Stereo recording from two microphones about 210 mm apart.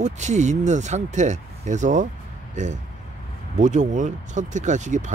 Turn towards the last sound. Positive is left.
turn(degrees=-35)  # may be behind; listen again after turning